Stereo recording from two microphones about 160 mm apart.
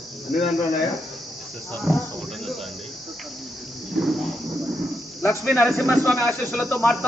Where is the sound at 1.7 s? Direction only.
Centre (ahead or behind).